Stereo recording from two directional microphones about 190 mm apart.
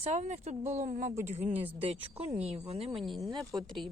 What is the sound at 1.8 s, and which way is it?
Speech, 30° right (ahead or behind).